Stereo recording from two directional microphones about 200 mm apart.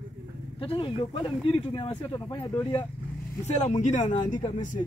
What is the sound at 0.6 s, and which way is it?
Speech, 25° left (ahead or behind).